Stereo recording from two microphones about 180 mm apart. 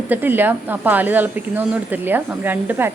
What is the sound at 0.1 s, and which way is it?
Speech, 10° right (ahead or behind).